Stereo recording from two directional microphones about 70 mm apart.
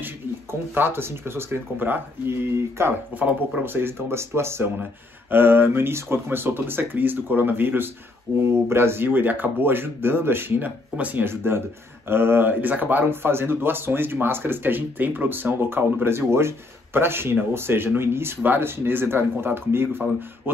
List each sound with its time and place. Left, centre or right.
0.0 s speech: right
3.1 s speech: right
11.2 s speech: right